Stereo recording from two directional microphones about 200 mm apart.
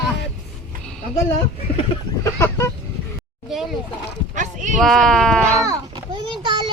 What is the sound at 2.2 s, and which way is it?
Speech, 15° left (ahead or behind).